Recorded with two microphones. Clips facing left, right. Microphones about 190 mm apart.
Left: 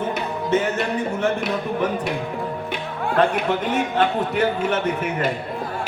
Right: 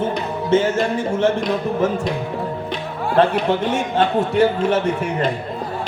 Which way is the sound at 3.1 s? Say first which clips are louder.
Right 3 dB; 30° right (ahead or behind).